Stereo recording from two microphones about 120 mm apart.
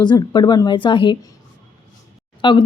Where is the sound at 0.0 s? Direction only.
35° left (ahead or behind).